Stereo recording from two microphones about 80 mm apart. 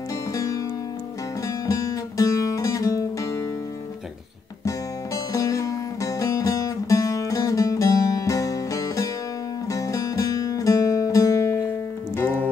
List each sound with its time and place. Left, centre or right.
0.3 s music: left
1.7 s music: left
4.6 s music: left